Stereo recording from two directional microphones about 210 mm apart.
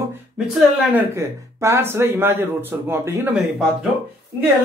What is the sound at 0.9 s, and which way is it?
Speech, 15° right (ahead or behind).